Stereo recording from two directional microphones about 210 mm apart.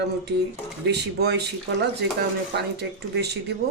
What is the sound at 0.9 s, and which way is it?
Speech, 55° right (ahead or behind).